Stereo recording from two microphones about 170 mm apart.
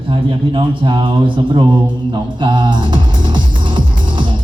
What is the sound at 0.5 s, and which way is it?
Speech, 30° right (ahead or behind).